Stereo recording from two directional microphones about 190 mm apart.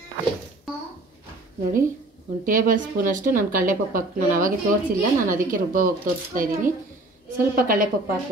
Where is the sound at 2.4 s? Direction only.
45° right (ahead or behind).